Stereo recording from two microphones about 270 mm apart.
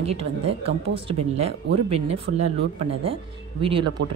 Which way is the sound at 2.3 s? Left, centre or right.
Right.